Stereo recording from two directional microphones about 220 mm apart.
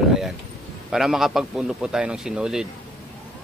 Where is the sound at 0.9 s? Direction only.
Centre (ahead or behind).